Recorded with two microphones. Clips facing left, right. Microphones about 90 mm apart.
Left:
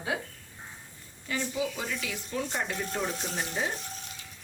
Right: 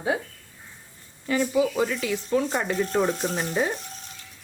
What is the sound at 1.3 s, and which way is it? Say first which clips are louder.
Speech: right 9 dB; 45° right (ahead or behind).